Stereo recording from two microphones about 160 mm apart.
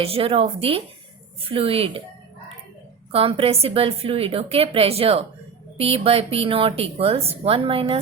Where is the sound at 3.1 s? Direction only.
35° right (ahead or behind).